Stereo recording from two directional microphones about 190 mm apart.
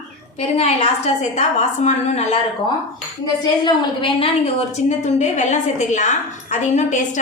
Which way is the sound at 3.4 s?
20° left (ahead or behind).